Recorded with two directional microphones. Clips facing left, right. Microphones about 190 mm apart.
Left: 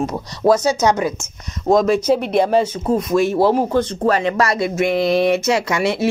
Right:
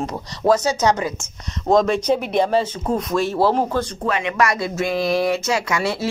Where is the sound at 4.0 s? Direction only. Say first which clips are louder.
Left 2 dB; 35° left (ahead or behind).